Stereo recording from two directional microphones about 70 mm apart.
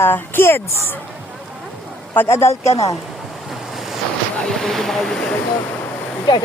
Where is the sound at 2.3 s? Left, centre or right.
Left.